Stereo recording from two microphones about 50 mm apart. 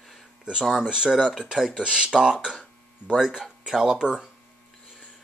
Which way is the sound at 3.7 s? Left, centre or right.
Centre.